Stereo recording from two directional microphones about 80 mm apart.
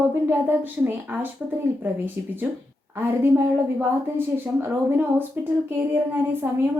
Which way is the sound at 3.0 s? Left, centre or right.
Right.